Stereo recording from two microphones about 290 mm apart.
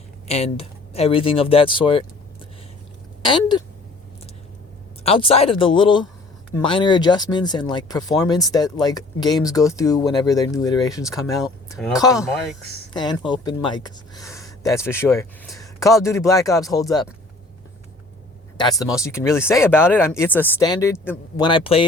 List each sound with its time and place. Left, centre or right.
0.3 s speech: left
3.2 s speech: centre
5.0 s speech: centre
18.5 s speech: centre